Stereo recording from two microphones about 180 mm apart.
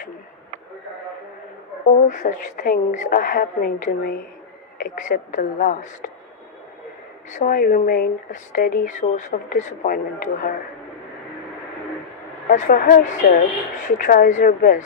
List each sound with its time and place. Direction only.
1.9 s speech: 40° left (ahead or behind)
7.3 s speech: 45° left (ahead or behind)
12.5 s speech: 45° left (ahead or behind)